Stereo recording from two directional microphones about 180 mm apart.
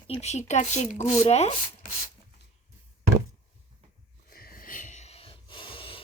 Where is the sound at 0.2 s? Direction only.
40° left (ahead or behind).